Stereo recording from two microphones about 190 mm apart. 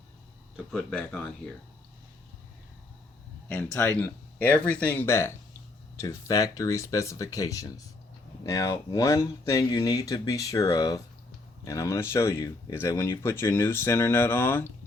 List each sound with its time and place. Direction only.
0.5 s speech: 5° left (ahead or behind)
3.5 s speech: 5° left (ahead or behind)